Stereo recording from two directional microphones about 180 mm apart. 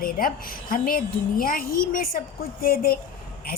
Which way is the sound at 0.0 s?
50° left (ahead or behind).